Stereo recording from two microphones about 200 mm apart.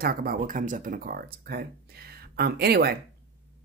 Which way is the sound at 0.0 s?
45° right (ahead or behind).